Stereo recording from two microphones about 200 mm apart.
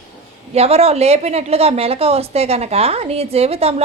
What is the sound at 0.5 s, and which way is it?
A woman's voice, 30° right (ahead or behind).